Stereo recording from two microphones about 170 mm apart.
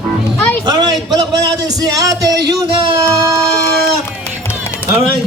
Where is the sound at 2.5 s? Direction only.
30° right (ahead or behind).